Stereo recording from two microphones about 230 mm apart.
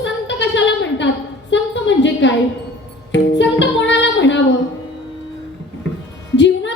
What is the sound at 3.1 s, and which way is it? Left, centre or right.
Music, left.